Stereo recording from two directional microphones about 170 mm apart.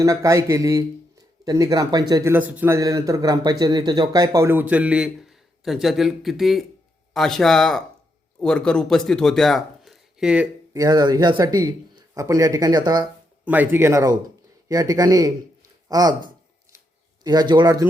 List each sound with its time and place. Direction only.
0.0 s speech: 20° right (ahead or behind)
2.3 s speech: 10° right (ahead or behind)
10.8 s speech: 20° right (ahead or behind)
13.4 s speech: 10° right (ahead or behind)
17.5 s speech: 25° right (ahead or behind)